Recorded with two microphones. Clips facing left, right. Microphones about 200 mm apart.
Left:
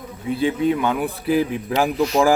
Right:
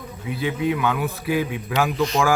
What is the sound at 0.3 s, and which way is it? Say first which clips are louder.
Speech: left 4 dB; 30° left (ahead or behind).